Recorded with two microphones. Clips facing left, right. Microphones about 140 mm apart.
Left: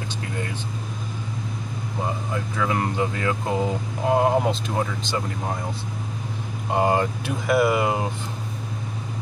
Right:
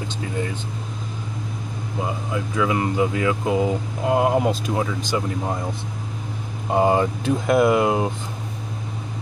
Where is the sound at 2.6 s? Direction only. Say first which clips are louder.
Right 3 dB; 10° right (ahead or behind).